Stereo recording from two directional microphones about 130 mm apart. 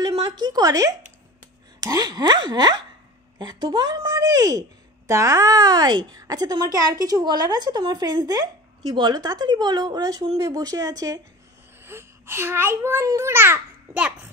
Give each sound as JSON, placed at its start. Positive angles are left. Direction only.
{"t": 0.4, "sound": "speech", "side_deg": -30}
{"t": 11.8, "sound": "a child's voice", "side_deg": -20}